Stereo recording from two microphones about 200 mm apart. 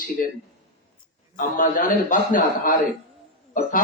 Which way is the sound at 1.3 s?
40° left (ahead or behind).